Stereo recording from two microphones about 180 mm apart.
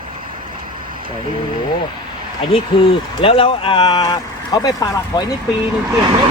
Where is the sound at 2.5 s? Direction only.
30° left (ahead or behind).